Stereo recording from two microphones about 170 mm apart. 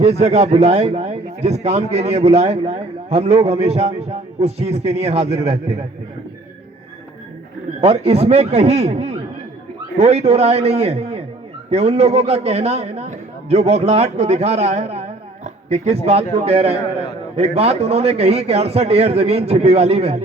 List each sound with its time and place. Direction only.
0.0 s a man's voice: 40° right (ahead or behind)
7.8 s a man's voice: 40° right (ahead or behind)